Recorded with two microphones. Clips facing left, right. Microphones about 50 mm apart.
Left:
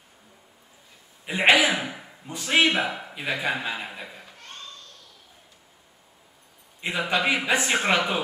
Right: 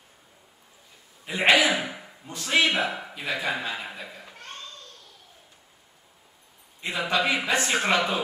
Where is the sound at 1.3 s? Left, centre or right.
Centre.